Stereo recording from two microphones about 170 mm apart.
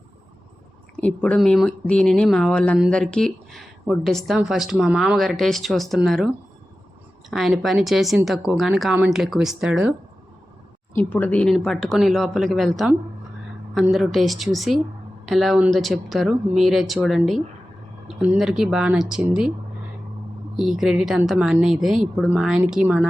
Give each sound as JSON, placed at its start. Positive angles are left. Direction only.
{"t": 1.0, "sound": "speech", "side_deg": 5}
{"t": 10.9, "sound": "speech", "side_deg": 10}
{"t": 20.6, "sound": "speech", "side_deg": 0}